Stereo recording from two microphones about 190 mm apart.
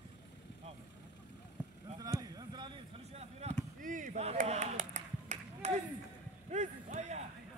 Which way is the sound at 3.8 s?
45° right (ahead or behind).